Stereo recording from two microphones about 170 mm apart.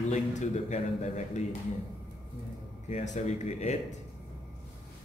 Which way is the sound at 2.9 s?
45° left (ahead or behind).